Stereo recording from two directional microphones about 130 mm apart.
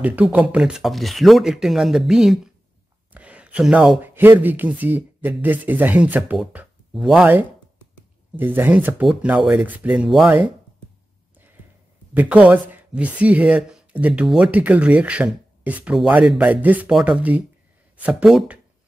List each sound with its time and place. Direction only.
0.0 s speech: 10° right (ahead or behind)
3.1 s a sound: 10° right (ahead or behind)
4.0 s speech: 15° right (ahead or behind)
8.4 s speech: 15° right (ahead or behind)
12.1 s speech: 10° right (ahead or behind)